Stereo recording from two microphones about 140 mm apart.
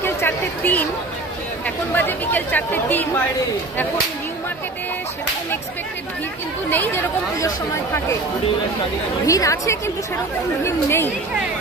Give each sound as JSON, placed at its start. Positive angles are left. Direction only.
{"t": 0.0, "sound": "a sound", "side_deg": 15}
{"t": 2.0, "sound": "speech", "side_deg": 15}
{"t": 6.7, "sound": "speech", "side_deg": 15}
{"t": 9.2, "sound": "a woman's voice", "side_deg": 25}